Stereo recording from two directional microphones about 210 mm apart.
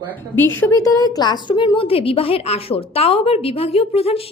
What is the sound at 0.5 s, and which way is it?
A woman's voice, 15° left (ahead or behind).